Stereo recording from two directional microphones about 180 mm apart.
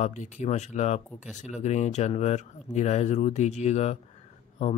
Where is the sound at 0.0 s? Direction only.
40° left (ahead or behind).